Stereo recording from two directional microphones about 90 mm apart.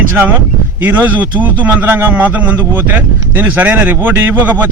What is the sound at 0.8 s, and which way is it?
A man's voice, 20° right (ahead or behind).